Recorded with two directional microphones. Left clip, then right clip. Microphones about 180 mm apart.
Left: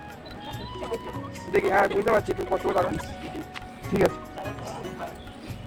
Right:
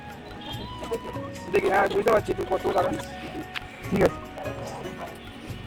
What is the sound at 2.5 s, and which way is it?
Speech, 20° right (ahead or behind).